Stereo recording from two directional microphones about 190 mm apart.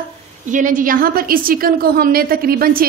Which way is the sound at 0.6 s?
45° right (ahead or behind).